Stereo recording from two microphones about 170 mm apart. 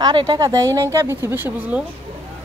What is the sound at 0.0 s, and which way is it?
Speech, 25° right (ahead or behind).